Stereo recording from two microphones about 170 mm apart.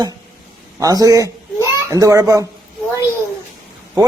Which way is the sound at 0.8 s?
20° right (ahead or behind).